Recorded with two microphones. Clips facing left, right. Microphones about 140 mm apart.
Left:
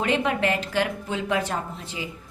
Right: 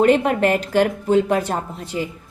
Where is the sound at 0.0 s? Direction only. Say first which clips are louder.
Right 8 dB; 45° right (ahead or behind).